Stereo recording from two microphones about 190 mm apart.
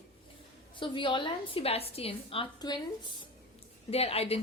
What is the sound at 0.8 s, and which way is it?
A woman's voice, 25° left (ahead or behind).